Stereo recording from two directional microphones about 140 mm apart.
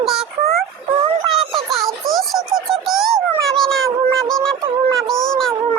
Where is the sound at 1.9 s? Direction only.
Centre (ahead or behind).